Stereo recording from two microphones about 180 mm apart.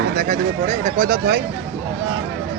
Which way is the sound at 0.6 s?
45° right (ahead or behind).